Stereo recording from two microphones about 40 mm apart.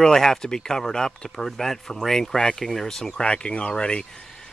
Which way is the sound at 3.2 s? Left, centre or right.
Left.